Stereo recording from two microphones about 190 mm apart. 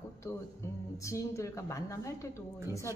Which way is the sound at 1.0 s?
15° left (ahead or behind).